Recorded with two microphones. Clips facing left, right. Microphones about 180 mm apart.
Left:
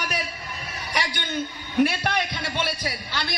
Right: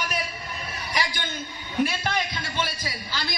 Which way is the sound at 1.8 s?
65° left (ahead or behind).